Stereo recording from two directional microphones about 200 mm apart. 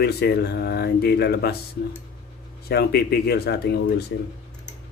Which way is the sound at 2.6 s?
50° left (ahead or behind).